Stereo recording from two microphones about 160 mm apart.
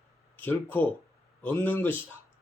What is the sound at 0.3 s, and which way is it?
Speech, 10° left (ahead or behind).